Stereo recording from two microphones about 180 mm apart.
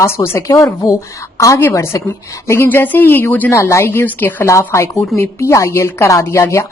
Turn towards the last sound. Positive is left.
turn(degrees=15)  # may be behind; listen again after turning